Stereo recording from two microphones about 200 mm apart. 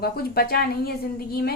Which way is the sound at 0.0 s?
50° left (ahead or behind).